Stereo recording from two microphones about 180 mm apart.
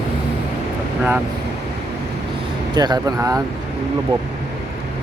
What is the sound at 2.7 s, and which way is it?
Speech, 25° right (ahead or behind).